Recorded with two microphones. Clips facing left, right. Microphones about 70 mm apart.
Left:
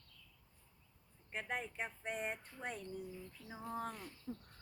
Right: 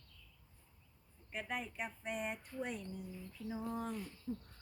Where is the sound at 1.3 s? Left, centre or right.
Left.